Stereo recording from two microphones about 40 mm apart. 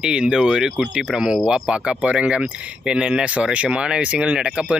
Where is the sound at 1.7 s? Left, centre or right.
Right.